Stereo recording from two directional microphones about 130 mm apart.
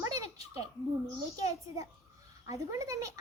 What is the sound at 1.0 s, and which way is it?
A child's voice, 25° right (ahead or behind).